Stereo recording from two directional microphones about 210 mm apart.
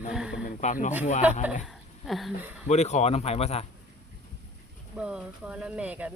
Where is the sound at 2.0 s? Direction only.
Centre (ahead or behind).